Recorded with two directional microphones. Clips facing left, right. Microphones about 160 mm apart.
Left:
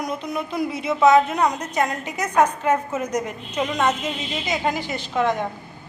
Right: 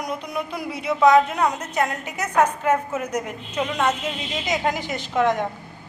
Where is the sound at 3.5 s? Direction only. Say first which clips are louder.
Left 1 dB; 10° left (ahead or behind).